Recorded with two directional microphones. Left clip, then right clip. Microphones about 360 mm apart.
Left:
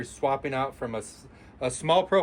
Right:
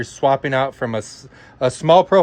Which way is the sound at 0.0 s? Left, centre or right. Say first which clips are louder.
Right 10 dB; centre.